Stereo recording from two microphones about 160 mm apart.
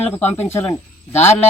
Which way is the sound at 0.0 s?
15° left (ahead or behind).